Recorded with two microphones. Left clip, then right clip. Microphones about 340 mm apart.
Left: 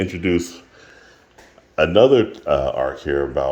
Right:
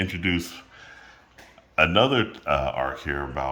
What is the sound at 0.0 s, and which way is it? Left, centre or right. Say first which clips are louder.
Speech: left 5 dB; centre.